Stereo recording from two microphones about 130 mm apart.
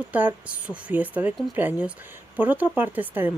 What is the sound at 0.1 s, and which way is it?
Speech, 10° right (ahead or behind).